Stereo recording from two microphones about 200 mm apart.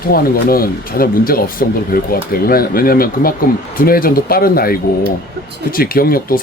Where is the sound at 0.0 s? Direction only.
50° left (ahead or behind).